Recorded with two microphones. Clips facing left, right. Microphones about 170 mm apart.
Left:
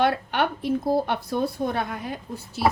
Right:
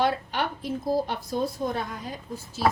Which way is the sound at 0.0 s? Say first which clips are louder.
Left 3 dB; 65° left (ahead or behind).